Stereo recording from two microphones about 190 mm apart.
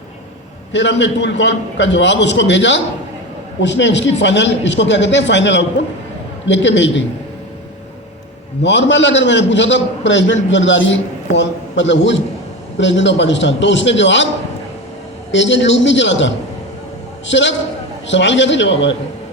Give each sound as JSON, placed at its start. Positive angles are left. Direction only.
{"t": 0.7, "sound": "a man's voice", "side_deg": 70}
{"t": 8.6, "sound": "a man's voice", "side_deg": 70}
{"t": 15.3, "sound": "a man's voice", "side_deg": 75}